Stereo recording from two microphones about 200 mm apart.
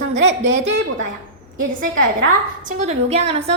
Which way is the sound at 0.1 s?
35° right (ahead or behind).